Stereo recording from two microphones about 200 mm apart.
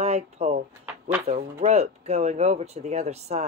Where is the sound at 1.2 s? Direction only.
35° right (ahead or behind).